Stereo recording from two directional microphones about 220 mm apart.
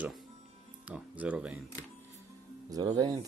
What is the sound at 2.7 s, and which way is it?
Speech, 20° right (ahead or behind).